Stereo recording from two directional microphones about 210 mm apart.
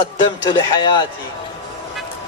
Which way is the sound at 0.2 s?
20° left (ahead or behind).